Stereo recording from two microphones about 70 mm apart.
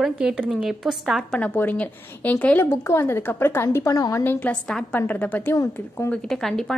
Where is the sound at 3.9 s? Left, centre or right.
Left.